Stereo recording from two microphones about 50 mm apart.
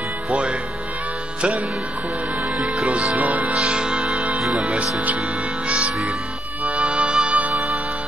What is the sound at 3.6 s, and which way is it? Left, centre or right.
Speech, centre.